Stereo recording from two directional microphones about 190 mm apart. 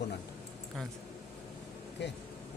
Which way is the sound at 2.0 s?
65° left (ahead or behind).